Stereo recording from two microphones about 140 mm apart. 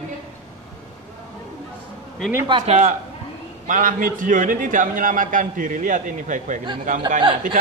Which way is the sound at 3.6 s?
70° right (ahead or behind).